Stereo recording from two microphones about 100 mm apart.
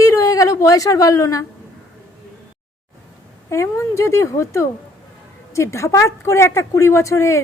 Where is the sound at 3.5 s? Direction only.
30° left (ahead or behind).